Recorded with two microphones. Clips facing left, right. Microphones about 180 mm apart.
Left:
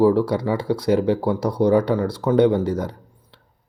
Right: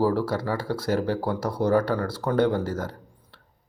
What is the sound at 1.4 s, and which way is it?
Speech, 5° right (ahead or behind).